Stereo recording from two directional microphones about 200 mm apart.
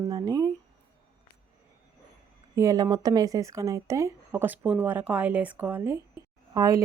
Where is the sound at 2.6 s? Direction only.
15° right (ahead or behind).